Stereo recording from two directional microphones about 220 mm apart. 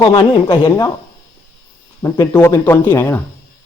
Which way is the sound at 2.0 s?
10° left (ahead or behind).